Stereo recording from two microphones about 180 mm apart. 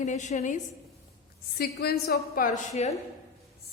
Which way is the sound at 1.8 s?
60° left (ahead or behind).